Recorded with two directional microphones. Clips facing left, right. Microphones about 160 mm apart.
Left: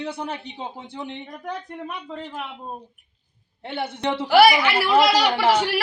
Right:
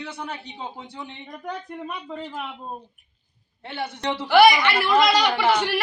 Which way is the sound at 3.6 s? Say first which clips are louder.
Left 2 dB; 30° left (ahead or behind).